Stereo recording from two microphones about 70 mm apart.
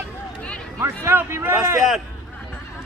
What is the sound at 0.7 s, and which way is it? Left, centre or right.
Speech, right.